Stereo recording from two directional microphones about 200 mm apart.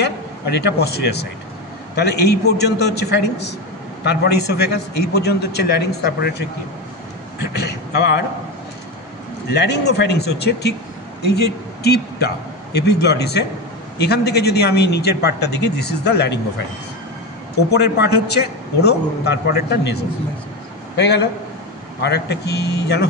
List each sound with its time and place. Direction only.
0.0 s a man's voice: 55° left (ahead or behind)
9.5 s a man's voice: 55° left (ahead or behind)
17.6 s a man's voice: 55° left (ahead or behind)